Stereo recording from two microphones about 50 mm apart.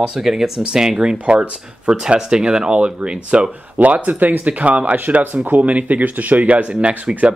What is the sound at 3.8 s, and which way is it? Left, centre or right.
Speech, right.